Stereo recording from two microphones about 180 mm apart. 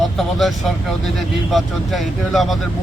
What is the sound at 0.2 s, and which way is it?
Speech, centre (ahead or behind).